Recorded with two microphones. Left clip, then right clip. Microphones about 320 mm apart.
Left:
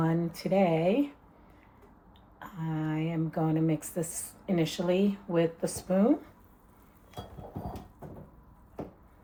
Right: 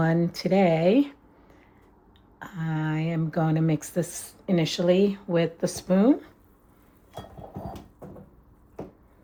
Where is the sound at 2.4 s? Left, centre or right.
Right.